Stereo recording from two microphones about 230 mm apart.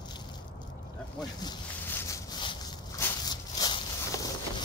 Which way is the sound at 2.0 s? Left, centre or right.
Centre.